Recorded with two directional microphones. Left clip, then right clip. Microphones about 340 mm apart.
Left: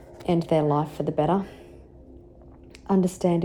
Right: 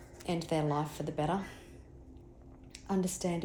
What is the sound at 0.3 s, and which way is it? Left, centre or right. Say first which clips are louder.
Speech: left 11 dB; left.